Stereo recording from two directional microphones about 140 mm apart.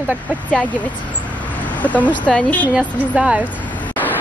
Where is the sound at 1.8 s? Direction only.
10° left (ahead or behind).